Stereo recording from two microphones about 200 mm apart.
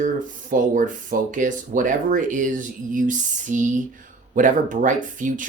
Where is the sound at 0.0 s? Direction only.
40° right (ahead or behind).